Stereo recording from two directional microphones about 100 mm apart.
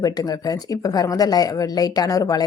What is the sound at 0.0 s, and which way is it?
Speech, 40° left (ahead or behind).